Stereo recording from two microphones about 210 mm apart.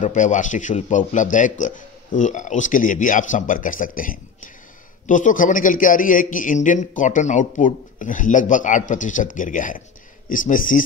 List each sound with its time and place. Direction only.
0.0 s a man's voice: 35° left (ahead or behind)